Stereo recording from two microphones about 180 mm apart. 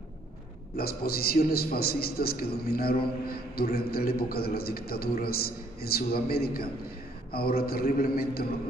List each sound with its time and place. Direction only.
0.7 s a man's voice: 60° left (ahead or behind)